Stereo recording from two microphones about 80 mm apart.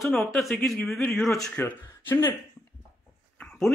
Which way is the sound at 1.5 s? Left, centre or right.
Left.